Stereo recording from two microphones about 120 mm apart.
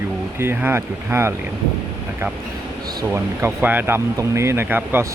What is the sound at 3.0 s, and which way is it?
Speech, 20° right (ahead or behind).